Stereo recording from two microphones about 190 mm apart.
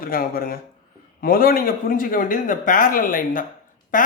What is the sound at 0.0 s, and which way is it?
Speech, 50° left (ahead or behind).